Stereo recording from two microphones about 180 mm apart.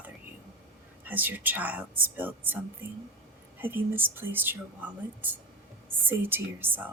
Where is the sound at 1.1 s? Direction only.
10° right (ahead or behind).